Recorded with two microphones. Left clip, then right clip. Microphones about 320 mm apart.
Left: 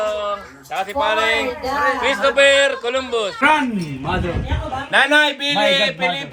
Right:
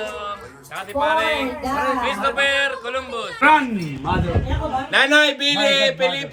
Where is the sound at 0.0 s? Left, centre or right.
Left.